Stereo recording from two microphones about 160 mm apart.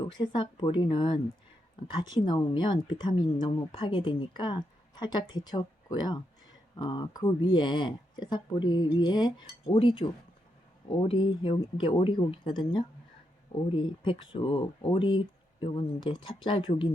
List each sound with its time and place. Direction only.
0.0 s speech: 30° left (ahead or behind)